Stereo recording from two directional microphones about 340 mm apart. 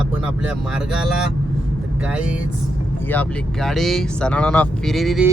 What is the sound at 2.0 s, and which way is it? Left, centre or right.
Speech, centre.